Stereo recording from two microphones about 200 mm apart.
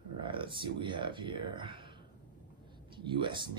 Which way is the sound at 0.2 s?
25° right (ahead or behind).